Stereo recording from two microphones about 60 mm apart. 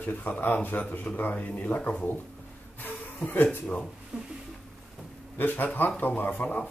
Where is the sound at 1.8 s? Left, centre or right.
Centre.